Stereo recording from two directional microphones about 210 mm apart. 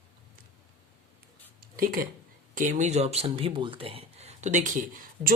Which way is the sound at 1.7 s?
45° right (ahead or behind).